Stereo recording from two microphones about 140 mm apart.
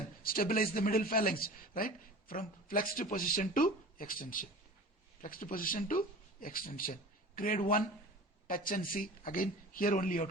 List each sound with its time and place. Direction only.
0.2 s a man's voice: 90° left; by 10.2 s 75° left (ahead or behind)